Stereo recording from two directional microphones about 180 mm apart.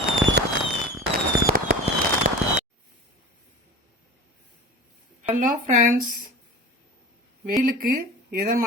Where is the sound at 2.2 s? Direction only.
45° right (ahead or behind).